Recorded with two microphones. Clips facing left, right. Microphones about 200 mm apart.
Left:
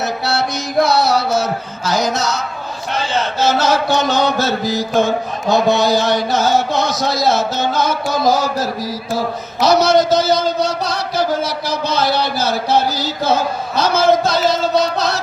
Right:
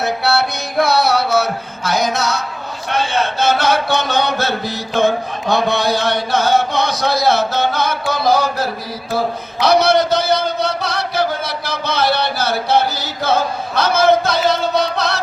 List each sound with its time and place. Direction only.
0.0 s music: 60° right (ahead or behind)
2.9 s chant: 60° right (ahead or behind)
9.6 s a sound: 60° right (ahead or behind)